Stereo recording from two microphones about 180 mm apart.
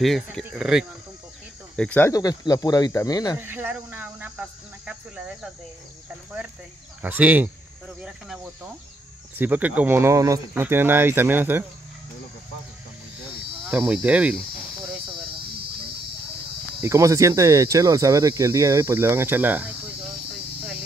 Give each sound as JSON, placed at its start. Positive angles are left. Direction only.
{"t": 0.0, "sound": "speech", "side_deg": 0}
{"t": 1.8, "sound": "speech", "side_deg": 10}
{"t": 3.3, "sound": "speech", "side_deg": -10}
{"t": 7.0, "sound": "speech", "side_deg": -10}
{"t": 9.4, "sound": "speech", "side_deg": -10}
{"t": 13.7, "sound": "speech", "side_deg": -10}
{"t": 16.8, "sound": "speech", "side_deg": -15}